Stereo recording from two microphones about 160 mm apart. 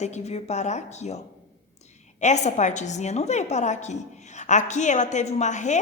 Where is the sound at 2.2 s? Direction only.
45° left (ahead or behind).